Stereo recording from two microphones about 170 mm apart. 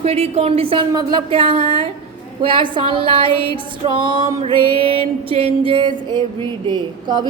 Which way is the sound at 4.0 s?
30° right (ahead or behind).